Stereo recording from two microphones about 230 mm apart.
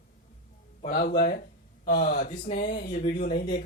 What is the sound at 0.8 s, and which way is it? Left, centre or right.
Speech, left.